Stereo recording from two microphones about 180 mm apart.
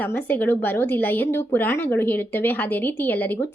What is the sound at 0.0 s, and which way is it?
Speech, 10° left (ahead or behind).